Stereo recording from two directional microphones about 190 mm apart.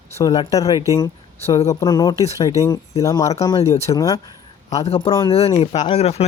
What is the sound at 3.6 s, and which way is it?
Speech, 35° left (ahead or behind).